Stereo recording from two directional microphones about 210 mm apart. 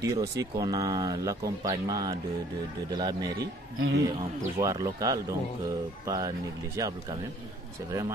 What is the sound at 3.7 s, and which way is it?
Speech, 60° right (ahead or behind).